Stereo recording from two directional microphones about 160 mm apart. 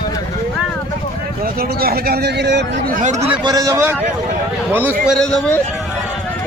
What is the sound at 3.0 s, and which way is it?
Speech, 45° right (ahead or behind).